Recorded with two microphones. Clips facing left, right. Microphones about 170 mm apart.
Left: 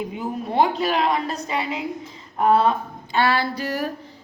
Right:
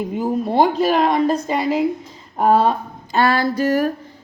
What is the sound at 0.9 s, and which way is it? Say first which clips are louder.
Speech: right 5 dB; 45° right (ahead or behind).